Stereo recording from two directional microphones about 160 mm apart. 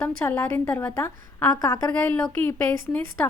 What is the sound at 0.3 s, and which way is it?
A woman's voice, 15° left (ahead or behind).